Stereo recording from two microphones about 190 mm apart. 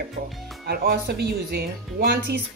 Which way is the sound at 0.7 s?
55° right (ahead or behind).